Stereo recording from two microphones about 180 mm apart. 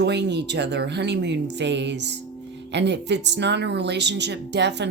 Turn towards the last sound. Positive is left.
turn(degrees=-70)  # may be behind; listen again after turning